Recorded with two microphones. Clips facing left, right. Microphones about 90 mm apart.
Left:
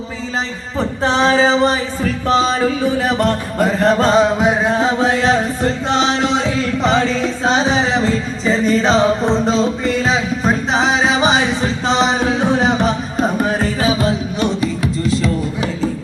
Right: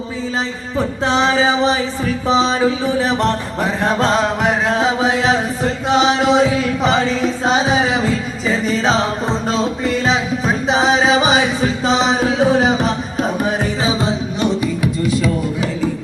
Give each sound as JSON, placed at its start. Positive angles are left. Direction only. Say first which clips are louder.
{"t": 0.8, "sound": "music", "louder": "left 1 dB", "side_deg": -5}
{"t": 13.8, "sound": "music", "louder": "left 2 dB", "side_deg": -20}